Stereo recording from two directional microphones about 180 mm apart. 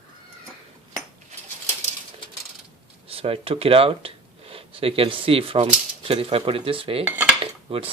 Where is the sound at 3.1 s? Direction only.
30° right (ahead or behind).